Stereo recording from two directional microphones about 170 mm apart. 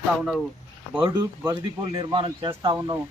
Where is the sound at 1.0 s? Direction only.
25° right (ahead or behind).